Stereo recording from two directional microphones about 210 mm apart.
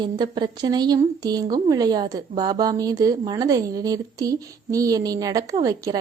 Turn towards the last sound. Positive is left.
turn(degrees=-15)  # may be behind; listen again after turning